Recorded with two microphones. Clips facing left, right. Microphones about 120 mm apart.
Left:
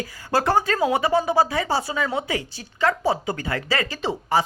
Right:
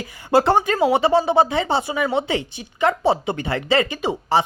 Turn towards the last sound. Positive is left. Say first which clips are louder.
# right 2 dB
turn(degrees=-30)  # may be behind; listen again after turning